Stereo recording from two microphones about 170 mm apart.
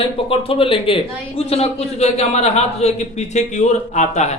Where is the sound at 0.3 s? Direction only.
30° left (ahead or behind).